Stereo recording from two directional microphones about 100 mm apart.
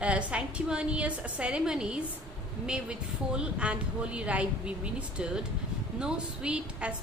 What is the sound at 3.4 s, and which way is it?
Speech, 10° right (ahead or behind).